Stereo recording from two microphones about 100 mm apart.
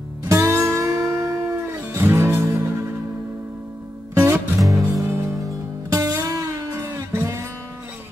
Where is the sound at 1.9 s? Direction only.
25° right (ahead or behind).